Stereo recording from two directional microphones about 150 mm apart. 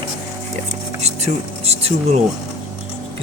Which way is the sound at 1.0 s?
45° right (ahead or behind).